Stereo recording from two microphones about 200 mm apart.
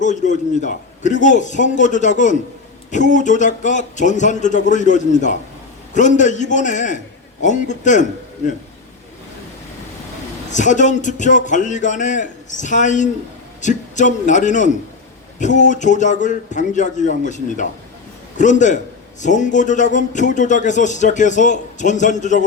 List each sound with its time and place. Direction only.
0.0 s a man's voice: 35° left (ahead or behind)
10.5 s a man's voice: 40° left (ahead or behind)